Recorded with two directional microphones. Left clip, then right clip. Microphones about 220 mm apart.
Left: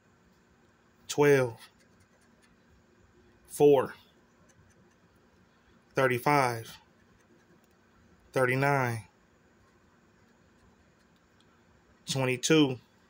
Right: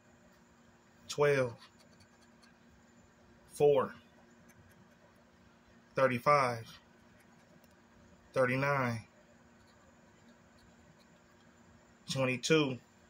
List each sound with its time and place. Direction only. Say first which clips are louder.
1.0 s speech: left 6 dB; 40° left (ahead or behind)
3.5 s speech: left 6 dB; 40° left (ahead or behind)
5.9 s speech: left 2 dB; 40° left (ahead or behind)
8.3 s speech: left 4 dB; 40° left (ahead or behind)
12.1 s speech: left 4 dB; 40° left (ahead or behind)